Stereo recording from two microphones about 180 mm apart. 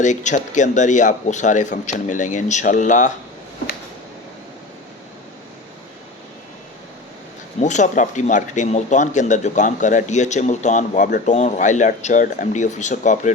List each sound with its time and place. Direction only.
0.0 s speech: 40° left (ahead or behind)
7.6 s speech: 45° left (ahead or behind)